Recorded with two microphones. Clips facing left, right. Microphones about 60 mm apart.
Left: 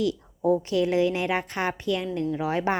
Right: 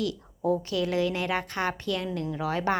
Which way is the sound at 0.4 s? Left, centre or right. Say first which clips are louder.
Left 4 dB; left.